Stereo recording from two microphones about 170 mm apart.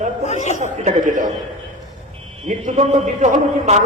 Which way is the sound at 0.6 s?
45° right (ahead or behind).